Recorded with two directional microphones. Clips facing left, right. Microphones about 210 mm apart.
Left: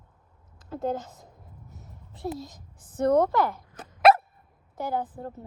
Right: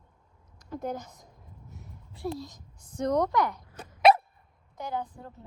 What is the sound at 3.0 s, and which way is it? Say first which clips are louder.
Speech: left 5 dB; 55° left (ahead or behind).